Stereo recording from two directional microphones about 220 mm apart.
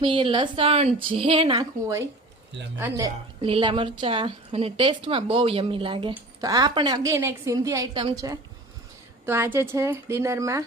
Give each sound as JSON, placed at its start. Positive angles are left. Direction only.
{"t": 0.0, "sound": "a woman's voice", "side_deg": -20}